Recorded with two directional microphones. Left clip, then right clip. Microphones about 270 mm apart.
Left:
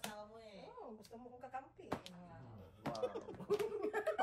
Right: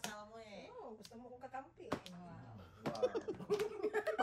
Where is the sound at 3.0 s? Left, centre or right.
Right.